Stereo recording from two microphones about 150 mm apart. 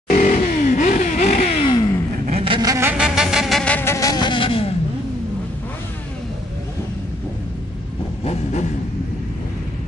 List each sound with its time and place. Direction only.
0.2 s vehicle: 55° left (ahead or behind); by 2.0 s 30° left (ahead or behind)
2.2 s a sound: 40° right (ahead or behind)
2.7 s insect: 15° right (ahead or behind); by 4.7 s 40° left (ahead or behind)
8.2 s vehicle: 45° left (ahead or behind)